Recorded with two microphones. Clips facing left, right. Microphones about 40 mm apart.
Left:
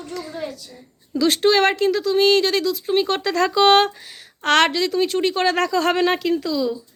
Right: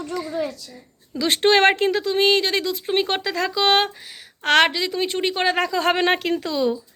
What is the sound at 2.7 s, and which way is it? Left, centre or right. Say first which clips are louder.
Speech: left 2 dB; right.